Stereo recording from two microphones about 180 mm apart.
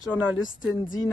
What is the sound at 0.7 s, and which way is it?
Speech, 20° left (ahead or behind).